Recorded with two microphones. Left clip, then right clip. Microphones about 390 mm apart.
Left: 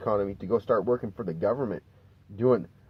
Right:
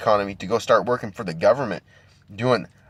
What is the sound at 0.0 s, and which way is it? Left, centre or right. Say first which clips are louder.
Speech: right 7 dB; right.